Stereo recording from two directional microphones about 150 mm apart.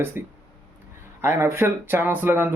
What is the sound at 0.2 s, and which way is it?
Speech, 15° right (ahead or behind).